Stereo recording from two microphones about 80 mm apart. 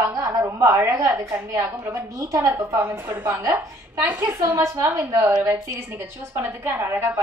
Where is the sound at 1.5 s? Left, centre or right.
Right.